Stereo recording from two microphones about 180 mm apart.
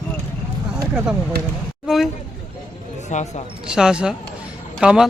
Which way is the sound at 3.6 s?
5° right (ahead or behind).